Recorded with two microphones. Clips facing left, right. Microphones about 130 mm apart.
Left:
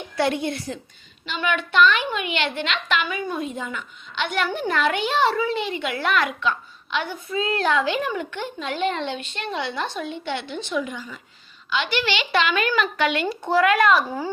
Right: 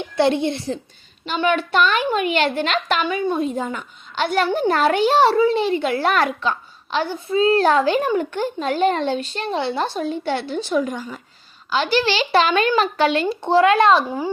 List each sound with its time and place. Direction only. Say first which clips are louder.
0.2 s a child's voice: right 5 dB; 25° right (ahead or behind)
1.2 s a child's voice: right 6 dB; 35° right (ahead or behind)